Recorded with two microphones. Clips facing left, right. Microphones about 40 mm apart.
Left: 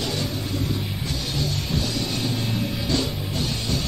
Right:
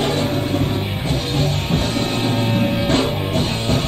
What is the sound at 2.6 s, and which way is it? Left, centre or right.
Music, right.